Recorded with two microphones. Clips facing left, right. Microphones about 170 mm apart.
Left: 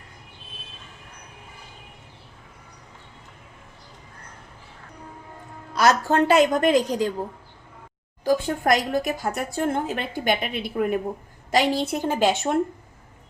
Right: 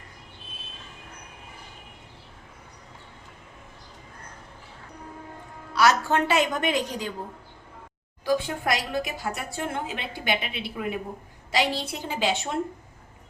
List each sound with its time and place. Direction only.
5.8 s a woman's voice: 40° left (ahead or behind)
8.2 s speech: 45° left (ahead or behind)